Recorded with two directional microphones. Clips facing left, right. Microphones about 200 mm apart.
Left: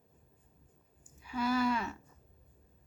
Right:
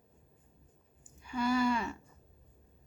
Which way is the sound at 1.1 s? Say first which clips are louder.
Right 1 dB; 5° left (ahead or behind).